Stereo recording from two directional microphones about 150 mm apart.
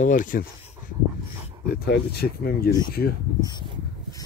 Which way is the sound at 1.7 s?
90° left.